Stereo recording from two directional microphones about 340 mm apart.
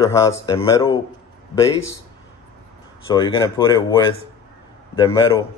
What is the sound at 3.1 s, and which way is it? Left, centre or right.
Speech, centre.